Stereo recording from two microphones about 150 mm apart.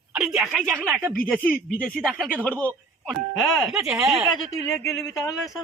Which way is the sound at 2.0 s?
5° right (ahead or behind).